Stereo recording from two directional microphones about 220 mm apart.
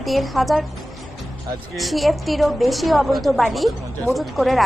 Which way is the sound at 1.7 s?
Centre (ahead or behind).